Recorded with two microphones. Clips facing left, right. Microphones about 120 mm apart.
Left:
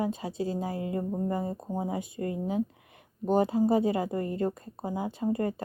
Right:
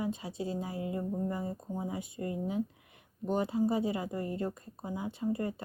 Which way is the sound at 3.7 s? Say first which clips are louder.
Left 6 dB; 65° left (ahead or behind).